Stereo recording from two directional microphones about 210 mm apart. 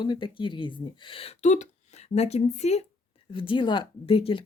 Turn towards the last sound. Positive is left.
turn(degrees=25)  # may be behind; listen again after turning